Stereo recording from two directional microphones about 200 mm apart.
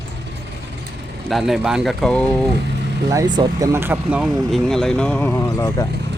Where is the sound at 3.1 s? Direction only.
20° right (ahead or behind); by 5.8 s 15° left (ahead or behind).